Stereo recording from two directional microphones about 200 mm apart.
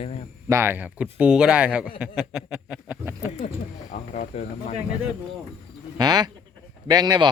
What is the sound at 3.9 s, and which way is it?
Speech, 35° left (ahead or behind).